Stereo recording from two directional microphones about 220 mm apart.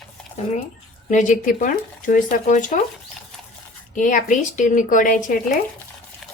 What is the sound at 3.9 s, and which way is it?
Speech, 35° left (ahead or behind).